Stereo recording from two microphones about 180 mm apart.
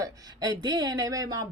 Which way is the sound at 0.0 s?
20° right (ahead or behind).